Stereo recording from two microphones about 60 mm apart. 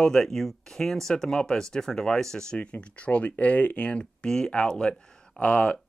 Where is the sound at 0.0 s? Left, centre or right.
Centre.